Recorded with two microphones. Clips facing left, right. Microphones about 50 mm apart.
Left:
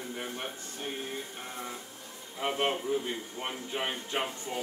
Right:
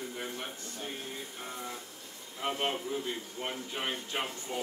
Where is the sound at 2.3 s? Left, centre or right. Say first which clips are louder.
Left 3 dB; left.